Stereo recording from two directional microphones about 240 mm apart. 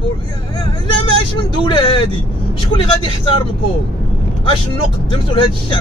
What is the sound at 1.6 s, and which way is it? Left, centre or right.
Speech, left.